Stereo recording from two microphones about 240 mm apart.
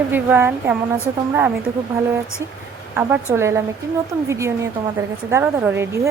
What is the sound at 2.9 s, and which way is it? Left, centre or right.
Speech, centre.